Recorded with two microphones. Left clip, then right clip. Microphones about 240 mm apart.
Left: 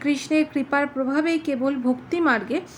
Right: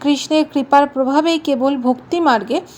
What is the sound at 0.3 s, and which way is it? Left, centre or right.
A woman's voice, right.